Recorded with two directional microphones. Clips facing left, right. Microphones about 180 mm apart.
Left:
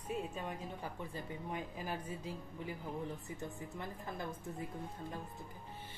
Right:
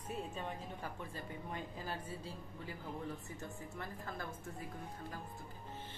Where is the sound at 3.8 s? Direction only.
20° left (ahead or behind).